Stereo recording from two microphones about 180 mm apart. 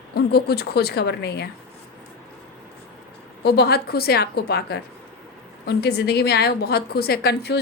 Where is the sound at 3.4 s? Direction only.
60° left (ahead or behind).